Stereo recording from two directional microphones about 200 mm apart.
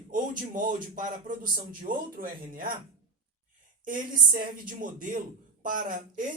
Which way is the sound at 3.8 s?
45° right (ahead or behind).